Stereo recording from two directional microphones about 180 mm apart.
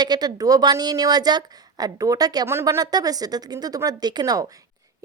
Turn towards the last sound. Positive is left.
turn(degrees=-20)  # may be behind; listen again after turning